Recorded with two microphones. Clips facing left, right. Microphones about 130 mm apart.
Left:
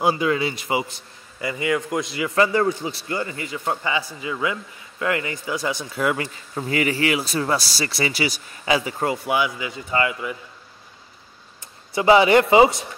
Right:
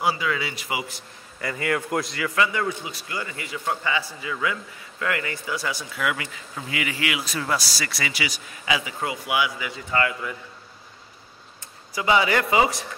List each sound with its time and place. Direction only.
0.0 s speech: 40° left (ahead or behind)
1.4 s a man's voice: 15° left (ahead or behind)
1.8 s a man's voice: centre (ahead or behind)
2.3 s a man's voice: 35° left (ahead or behind)
5.9 s speech: 35° left (ahead or behind)
9.8 s a man's voice: 15° left (ahead or behind)
11.9 s a man's voice: 30° left (ahead or behind)